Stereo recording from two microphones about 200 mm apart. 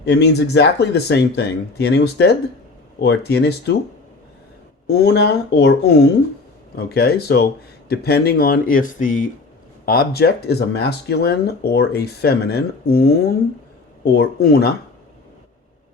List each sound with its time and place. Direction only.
0.0 s speech: 55° left (ahead or behind)
4.9 s speech: 55° left (ahead or behind)